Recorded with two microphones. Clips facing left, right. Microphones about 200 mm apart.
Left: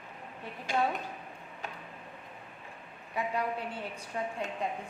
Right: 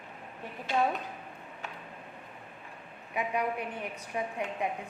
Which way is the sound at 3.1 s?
15° right (ahead or behind).